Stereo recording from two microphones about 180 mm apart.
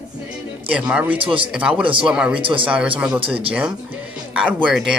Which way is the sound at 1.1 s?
30° right (ahead or behind).